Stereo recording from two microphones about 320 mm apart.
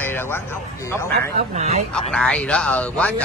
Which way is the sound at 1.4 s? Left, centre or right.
Right.